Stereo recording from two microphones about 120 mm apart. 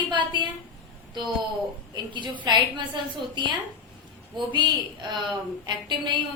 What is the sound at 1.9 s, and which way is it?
Speech, 40° right (ahead or behind).